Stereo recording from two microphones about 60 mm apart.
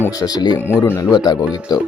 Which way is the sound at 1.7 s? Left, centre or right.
Left.